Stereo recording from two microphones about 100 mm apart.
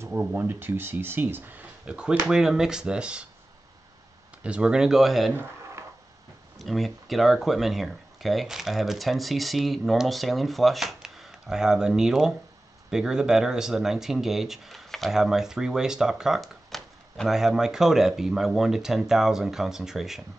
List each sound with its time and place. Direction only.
0.2 s speech: 15° right (ahead or behind)
4.4 s speech: 10° right (ahead or behind)
5.3 s a sound: 20° right (ahead or behind)
6.6 s speech: centre (ahead or behind)